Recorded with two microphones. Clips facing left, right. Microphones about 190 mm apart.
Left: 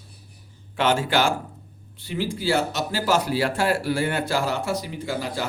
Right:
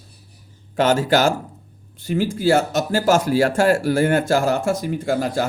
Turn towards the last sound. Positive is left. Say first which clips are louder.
# right 7 dB
turn(degrees=-50)  # may be behind; listen again after turning